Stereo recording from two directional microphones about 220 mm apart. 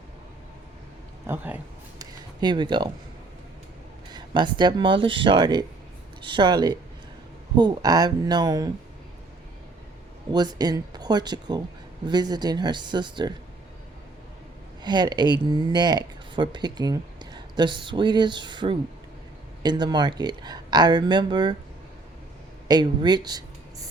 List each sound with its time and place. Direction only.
1.3 s speech: 10° right (ahead or behind)
2.4 s speech: 20° right (ahead or behind)
4.1 s speech: 20° right (ahead or behind)
10.3 s speech: 20° right (ahead or behind)
14.8 s speech: 20° right (ahead or behind)
22.7 s speech: 20° right (ahead or behind)